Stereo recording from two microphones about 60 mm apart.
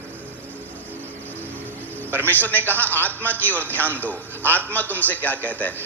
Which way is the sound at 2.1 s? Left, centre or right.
Left.